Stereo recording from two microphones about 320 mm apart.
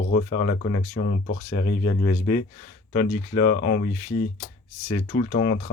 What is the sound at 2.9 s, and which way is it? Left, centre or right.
Speech, left.